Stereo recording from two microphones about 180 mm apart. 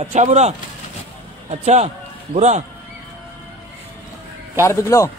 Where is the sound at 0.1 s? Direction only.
40° right (ahead or behind).